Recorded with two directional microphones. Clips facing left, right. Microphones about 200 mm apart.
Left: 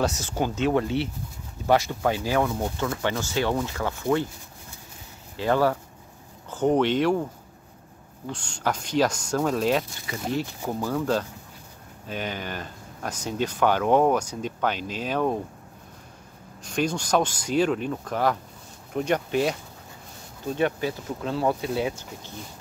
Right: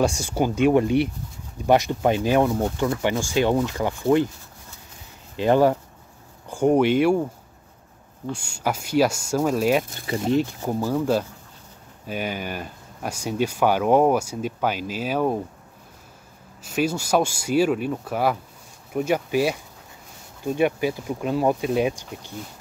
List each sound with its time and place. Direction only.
0.0 s speech: 10° right (ahead or behind)
5.4 s speech: 20° right (ahead or behind)
8.3 s speech: 10° right (ahead or behind)
16.6 s speech: 5° right (ahead or behind)
20.5 s speech: 10° right (ahead or behind)